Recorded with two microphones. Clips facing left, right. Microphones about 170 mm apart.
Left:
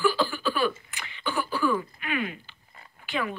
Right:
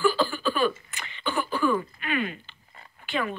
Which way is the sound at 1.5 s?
5° left (ahead or behind).